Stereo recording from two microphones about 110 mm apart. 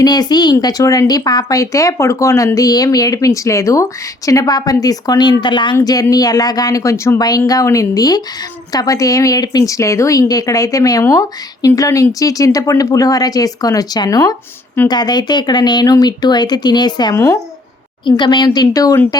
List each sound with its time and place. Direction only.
0.0 s speech: 40° left (ahead or behind)
18.2 s speech: 40° left (ahead or behind)